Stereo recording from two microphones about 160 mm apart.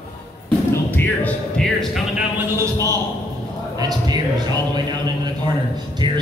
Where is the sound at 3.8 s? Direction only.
25° right (ahead or behind).